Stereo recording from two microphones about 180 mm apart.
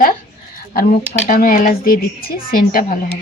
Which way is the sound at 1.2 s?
45° left (ahead or behind).